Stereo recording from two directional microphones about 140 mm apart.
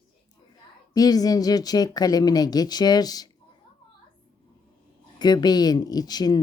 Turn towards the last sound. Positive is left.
turn(degrees=30)  # may be behind; listen again after turning